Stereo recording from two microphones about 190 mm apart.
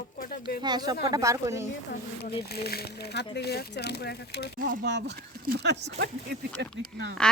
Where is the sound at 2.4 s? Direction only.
55° left (ahead or behind).